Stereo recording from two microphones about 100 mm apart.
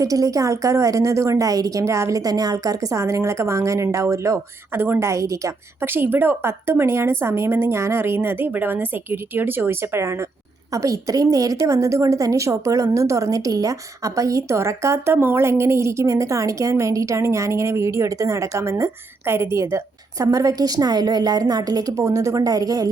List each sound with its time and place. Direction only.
0.0 s a woman's voice: 35° right (ahead or behind)